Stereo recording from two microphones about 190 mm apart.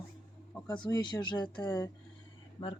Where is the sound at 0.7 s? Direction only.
20° left (ahead or behind).